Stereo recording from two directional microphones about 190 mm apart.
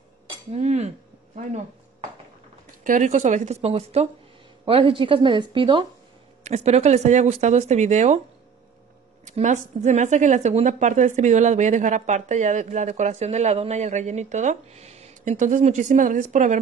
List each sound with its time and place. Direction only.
0.5 s dishes: 35° right (ahead or behind)
2.8 s a woman's voice: 40° right (ahead or behind)
9.2 s speech: 40° right (ahead or behind)